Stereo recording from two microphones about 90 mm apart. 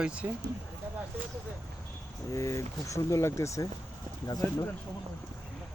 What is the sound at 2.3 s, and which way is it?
Speech, 35° left (ahead or behind).